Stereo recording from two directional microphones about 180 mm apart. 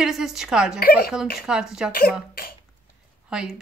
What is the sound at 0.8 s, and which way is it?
Speech, 55° left (ahead or behind).